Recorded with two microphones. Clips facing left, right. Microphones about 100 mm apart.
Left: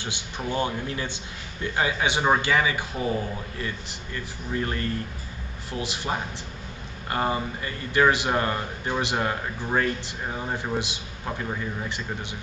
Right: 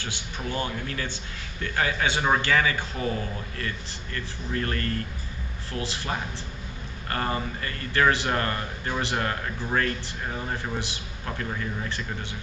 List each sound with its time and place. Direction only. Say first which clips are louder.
0.0 s a man's voice: left 2 dB; 20° left (ahead or behind)